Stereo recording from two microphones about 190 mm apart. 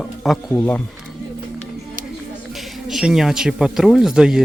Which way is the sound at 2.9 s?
Centre (ahead or behind).